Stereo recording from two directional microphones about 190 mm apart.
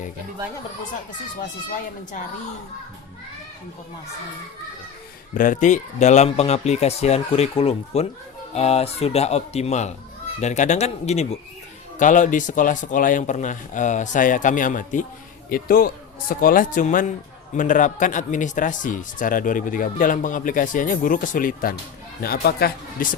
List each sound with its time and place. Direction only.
5.3 s speech: 45° left (ahead or behind)